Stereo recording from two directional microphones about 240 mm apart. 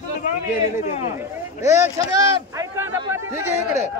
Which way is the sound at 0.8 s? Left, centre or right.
Left.